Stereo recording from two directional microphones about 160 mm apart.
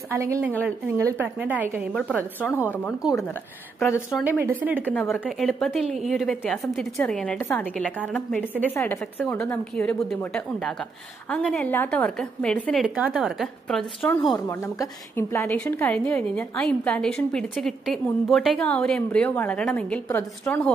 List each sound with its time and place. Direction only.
0.1 s a woman's voice: 20° right (ahead or behind)
2.0 s a woman's voice: 5° left (ahead or behind)
4.1 s a woman's voice: 10° right (ahead or behind)
4.8 s a woman's voice: 10° left (ahead or behind)
12.8 s a woman's voice: 5° right (ahead or behind)
14.3 s a woman's voice: 20° left (ahead or behind)